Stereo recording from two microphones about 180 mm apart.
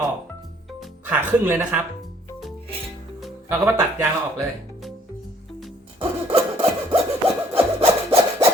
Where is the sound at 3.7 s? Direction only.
15° right (ahead or behind).